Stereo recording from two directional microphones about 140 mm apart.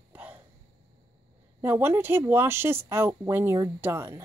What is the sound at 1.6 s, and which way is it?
Speech, 15° right (ahead or behind).